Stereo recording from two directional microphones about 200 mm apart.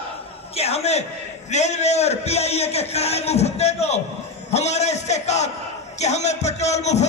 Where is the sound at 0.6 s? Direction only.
30° left (ahead or behind).